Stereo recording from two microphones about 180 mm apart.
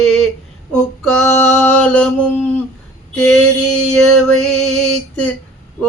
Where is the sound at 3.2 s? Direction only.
5° left (ahead or behind).